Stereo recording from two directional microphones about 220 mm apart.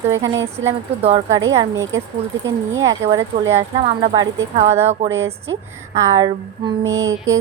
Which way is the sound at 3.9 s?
20° right (ahead or behind).